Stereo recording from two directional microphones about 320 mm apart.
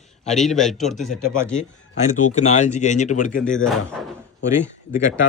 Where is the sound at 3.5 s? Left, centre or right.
Centre.